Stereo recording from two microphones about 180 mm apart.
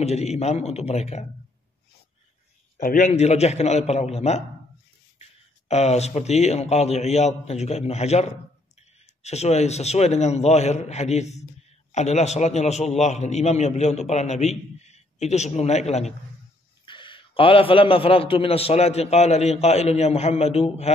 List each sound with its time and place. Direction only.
0.0 s a man's voice: 35° left (ahead or behind)
2.8 s a man's voice: 45° left (ahead or behind)